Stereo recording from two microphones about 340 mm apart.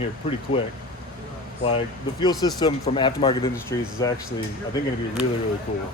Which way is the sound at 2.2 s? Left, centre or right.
Centre.